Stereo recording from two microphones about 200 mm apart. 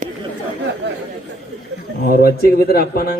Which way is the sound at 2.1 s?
50° left (ahead or behind).